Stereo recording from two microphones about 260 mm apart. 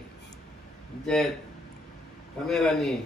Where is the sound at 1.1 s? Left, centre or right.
Centre.